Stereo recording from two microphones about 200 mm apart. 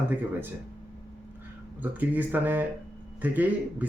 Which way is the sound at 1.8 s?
10° right (ahead or behind).